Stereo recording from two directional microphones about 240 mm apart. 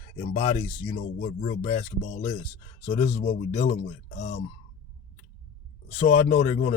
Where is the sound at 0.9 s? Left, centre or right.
Left.